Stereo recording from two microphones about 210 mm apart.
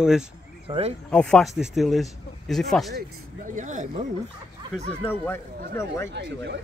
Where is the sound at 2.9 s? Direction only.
40° right (ahead or behind).